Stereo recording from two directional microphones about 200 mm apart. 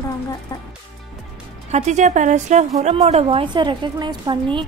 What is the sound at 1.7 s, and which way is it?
A woman's voice, 35° right (ahead or behind).